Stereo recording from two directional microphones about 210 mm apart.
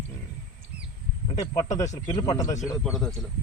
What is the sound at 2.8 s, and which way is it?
Speech, centre (ahead or behind).